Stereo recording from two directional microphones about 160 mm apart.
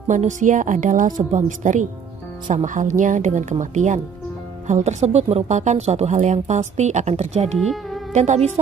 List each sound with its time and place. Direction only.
0.1 s speech: 50° right (ahead or behind)
7.5 s speech: centre (ahead or behind)
8.1 s speech: 45° right (ahead or behind)